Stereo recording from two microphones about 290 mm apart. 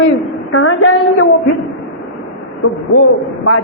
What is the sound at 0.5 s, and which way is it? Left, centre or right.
Speech, left.